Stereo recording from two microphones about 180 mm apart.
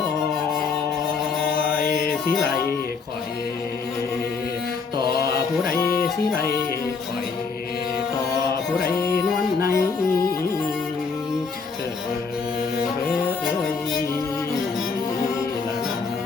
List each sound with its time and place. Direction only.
5.7 s music: 55° left (ahead or behind)
9.6 s music: 55° left (ahead or behind)